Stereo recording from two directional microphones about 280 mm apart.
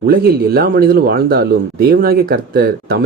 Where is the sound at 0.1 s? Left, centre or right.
Right.